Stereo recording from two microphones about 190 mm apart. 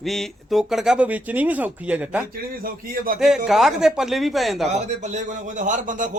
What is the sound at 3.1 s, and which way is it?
Speech, centre (ahead or behind).